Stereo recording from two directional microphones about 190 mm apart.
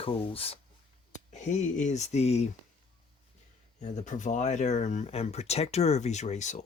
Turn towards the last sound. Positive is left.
turn(degrees=40)  # may be behind; listen again after turning